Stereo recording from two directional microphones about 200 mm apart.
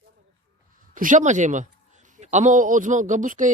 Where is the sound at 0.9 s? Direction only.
40° right (ahead or behind).